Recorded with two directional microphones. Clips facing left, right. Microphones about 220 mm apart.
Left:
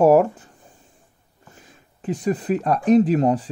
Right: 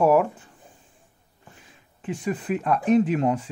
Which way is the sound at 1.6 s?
40° left (ahead or behind).